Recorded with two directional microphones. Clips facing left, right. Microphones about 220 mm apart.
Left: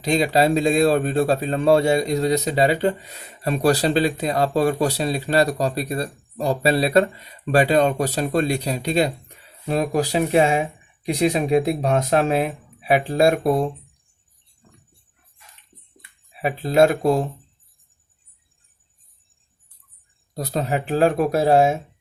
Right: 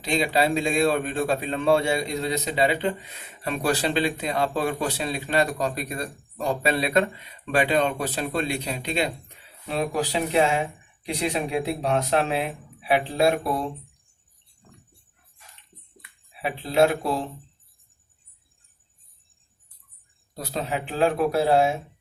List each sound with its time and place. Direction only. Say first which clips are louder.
0.0 s speech: left 5 dB; 40° left (ahead or behind)
16.4 s speech: left 4 dB; 45° left (ahead or behind)
20.3 s speech: left 5 dB; 40° left (ahead or behind)